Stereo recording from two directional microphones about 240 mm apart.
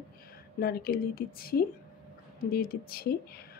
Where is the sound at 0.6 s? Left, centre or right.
Left.